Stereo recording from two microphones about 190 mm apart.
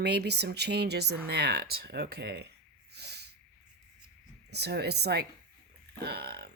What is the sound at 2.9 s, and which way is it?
Snort, 60° right (ahead or behind).